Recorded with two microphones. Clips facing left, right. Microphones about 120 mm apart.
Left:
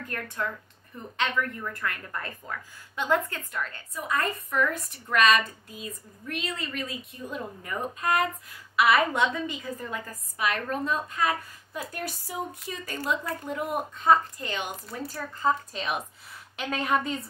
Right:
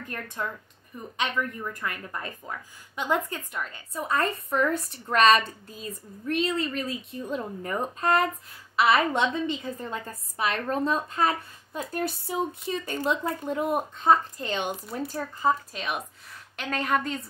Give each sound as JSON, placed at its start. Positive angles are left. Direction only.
{"t": 0.0, "sound": "a woman's voice", "side_deg": -20}
{"t": 3.9, "sound": "a woman's voice", "side_deg": -30}
{"t": 15.4, "sound": "a woman's voice", "side_deg": 0}